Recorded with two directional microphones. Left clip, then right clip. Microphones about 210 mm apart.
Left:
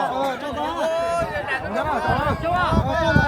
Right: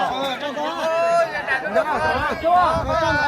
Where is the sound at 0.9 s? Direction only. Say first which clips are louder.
Right 4 dB; 25° left (ahead or behind).